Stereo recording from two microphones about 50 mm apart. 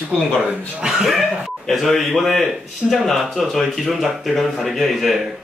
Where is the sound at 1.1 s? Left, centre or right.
Centre.